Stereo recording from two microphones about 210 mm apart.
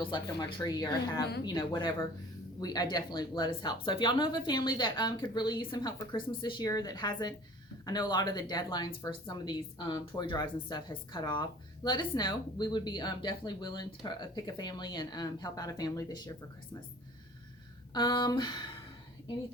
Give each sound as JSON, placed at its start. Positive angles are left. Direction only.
{"t": 0.0, "sound": "speech", "side_deg": 20}
{"t": 17.9, "sound": "speech", "side_deg": 20}